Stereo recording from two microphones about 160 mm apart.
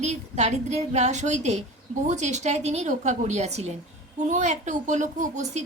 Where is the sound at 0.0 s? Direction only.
45° right (ahead or behind).